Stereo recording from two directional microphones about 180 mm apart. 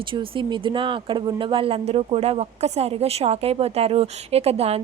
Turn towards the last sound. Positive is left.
turn(degrees=-35)  # may be behind; listen again after turning